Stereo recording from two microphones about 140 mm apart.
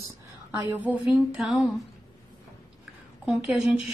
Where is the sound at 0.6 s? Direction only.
10° right (ahead or behind).